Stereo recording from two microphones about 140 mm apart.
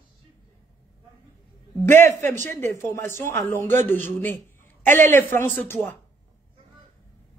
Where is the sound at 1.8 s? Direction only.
15° left (ahead or behind).